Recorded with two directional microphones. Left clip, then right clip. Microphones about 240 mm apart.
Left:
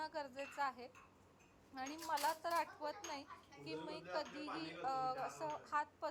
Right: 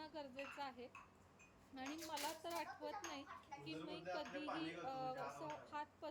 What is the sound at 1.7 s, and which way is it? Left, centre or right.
Speech, centre.